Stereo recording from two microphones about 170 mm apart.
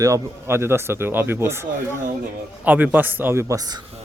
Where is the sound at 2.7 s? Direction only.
10° right (ahead or behind).